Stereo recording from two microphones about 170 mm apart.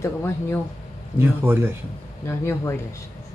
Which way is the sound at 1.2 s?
10° right (ahead or behind).